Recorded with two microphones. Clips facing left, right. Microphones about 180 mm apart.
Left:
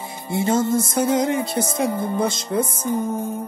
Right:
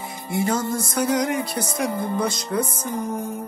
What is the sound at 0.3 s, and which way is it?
Music, 25° left (ahead or behind).